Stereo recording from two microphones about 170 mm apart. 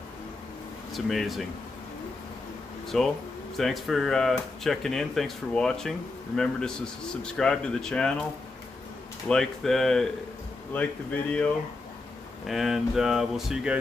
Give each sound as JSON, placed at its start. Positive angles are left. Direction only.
{"t": 0.9, "sound": "speech", "side_deg": 0}
{"t": 2.9, "sound": "speech", "side_deg": 5}
{"t": 9.3, "sound": "speech", "side_deg": 5}